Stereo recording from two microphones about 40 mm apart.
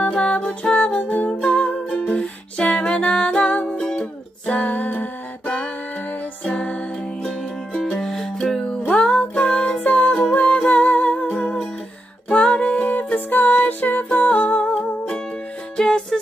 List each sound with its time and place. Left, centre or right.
0.2 s music: left
4.5 s music: left
6.4 s music: left
7.2 s music: centre
8.8 s music: left
12.3 s music: left
12.9 s music: left
14.3 s humming: left
15.8 s music: centre